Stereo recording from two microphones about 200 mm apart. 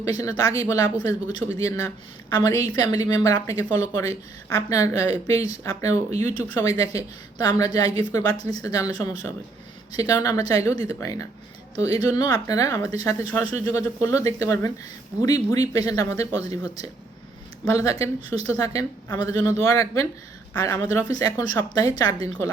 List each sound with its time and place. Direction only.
0.0 s speech: 15° left (ahead or behind)
6.1 s speech: 35° right (ahead or behind)
6.3 s speech: 15° left (ahead or behind)
17.7 s speech: 15° left (ahead or behind)